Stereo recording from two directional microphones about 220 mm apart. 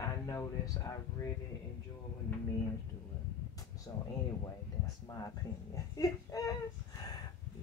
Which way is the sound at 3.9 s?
15° left (ahead or behind).